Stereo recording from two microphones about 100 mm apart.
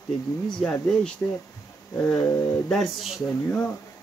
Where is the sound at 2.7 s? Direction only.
Centre (ahead or behind).